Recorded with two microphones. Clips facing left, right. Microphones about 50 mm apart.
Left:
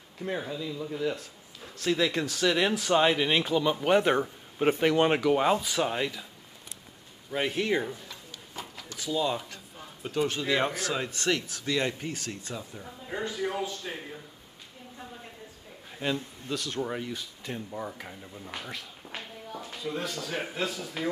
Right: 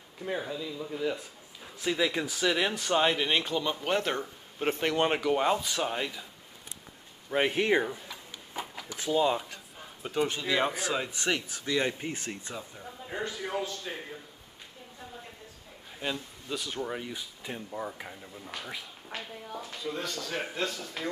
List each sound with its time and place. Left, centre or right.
0.2 s speech: centre
7.2 s a sound: right
8.9 s speech: right
10.1 s speech: centre
10.4 s speech: centre
10.7 s speech: centre
13.1 s speech: centre
13.4 s speech: centre
15.9 s speech: centre
17.1 s speech: centre